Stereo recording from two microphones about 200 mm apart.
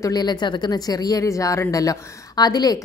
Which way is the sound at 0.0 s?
20° left (ahead or behind).